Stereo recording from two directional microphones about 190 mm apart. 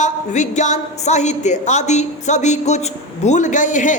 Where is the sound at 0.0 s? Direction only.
40° left (ahead or behind).